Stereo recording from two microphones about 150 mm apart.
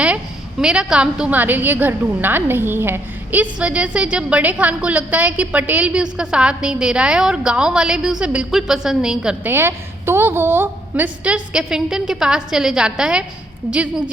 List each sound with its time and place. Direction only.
0.6 s a woman's voice: 5° right (ahead or behind)